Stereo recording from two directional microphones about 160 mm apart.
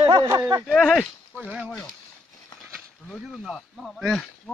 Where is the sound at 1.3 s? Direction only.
5° right (ahead or behind).